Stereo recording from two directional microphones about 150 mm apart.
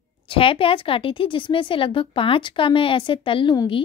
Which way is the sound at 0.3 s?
35° left (ahead or behind).